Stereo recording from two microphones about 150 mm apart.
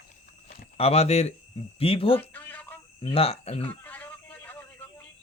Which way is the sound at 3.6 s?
10° left (ahead or behind).